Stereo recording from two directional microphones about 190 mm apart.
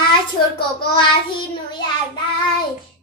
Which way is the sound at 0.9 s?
25° left (ahead or behind).